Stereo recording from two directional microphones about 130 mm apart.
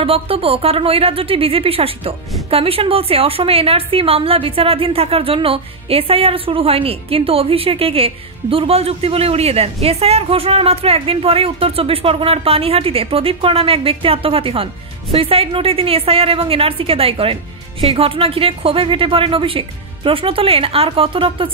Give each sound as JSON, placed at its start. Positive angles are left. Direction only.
{"t": 0.0, "sound": "a woman's voice", "side_deg": -45}